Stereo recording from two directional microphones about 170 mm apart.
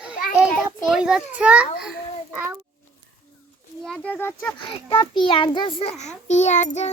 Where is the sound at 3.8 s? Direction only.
5° left (ahead or behind).